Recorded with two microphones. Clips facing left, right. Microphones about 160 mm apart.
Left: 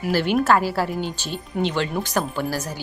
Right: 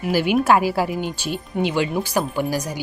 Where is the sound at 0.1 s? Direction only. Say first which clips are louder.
Right 2 dB; 10° right (ahead or behind).